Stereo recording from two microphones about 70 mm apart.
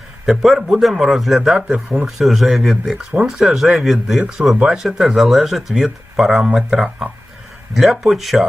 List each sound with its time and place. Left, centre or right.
0.3 s speech: centre
2.0 s speech: centre
4.2 s speech: centre